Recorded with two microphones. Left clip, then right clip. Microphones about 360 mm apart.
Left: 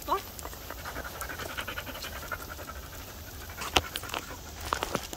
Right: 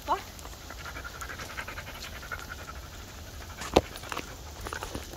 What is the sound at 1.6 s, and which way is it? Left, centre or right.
Pant, left.